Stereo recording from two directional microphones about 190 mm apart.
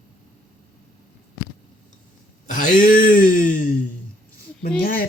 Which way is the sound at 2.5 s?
45° left (ahead or behind).